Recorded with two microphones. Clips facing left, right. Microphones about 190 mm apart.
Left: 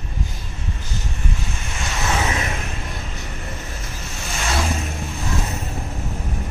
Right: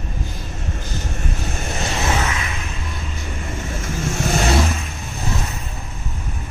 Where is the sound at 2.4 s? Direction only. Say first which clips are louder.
Left 2 dB; 45° left (ahead or behind).